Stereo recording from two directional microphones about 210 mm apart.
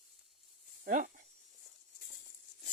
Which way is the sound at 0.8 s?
40° right (ahead or behind).